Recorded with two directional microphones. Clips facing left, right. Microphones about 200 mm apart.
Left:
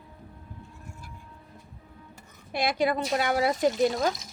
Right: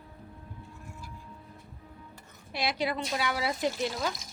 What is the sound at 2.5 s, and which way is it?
Speech, 50° left (ahead or behind).